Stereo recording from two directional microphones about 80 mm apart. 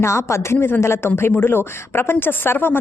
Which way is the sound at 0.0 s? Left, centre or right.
Left.